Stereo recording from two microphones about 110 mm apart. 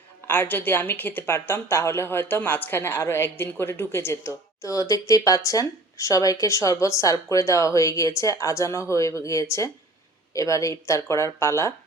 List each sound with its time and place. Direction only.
0.3 s a woman's voice: 15° left (ahead or behind)